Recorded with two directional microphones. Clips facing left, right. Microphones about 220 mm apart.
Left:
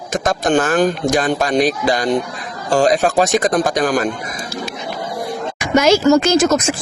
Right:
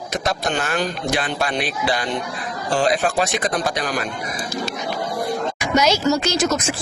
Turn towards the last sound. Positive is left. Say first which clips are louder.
# left 6 dB
turn(degrees=50)  # may be behind; listen again after turning